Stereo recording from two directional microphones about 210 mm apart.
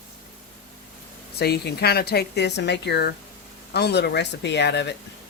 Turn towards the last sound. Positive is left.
turn(degrees=55)  # may be behind; listen again after turning